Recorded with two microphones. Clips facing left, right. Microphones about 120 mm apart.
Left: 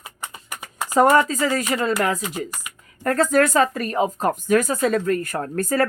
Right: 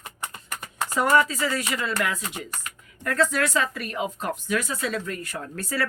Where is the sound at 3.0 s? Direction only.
45° left (ahead or behind).